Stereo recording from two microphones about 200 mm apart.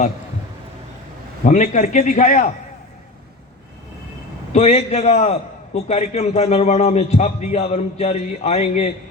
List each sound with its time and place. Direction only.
1.5 s a man's voice: 35° left (ahead or behind)
4.5 s a man's voice: 35° left (ahead or behind)